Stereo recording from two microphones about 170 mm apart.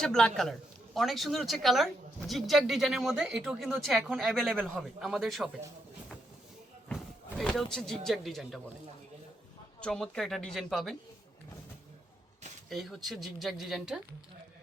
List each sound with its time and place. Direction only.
0.0 s speech: 5° left (ahead or behind)
6.9 s speech: centre (ahead or behind)
9.8 s speech: 5° left (ahead or behind)
12.7 s speech: centre (ahead or behind)